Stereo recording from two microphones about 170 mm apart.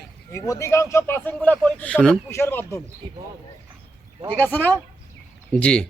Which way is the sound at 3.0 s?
25° right (ahead or behind).